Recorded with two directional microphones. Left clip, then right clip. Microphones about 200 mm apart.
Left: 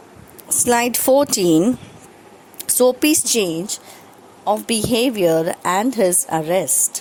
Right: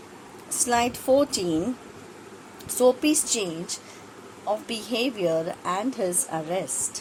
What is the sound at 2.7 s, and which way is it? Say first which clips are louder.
A woman's voice: left 5 dB; 45° left (ahead or behind).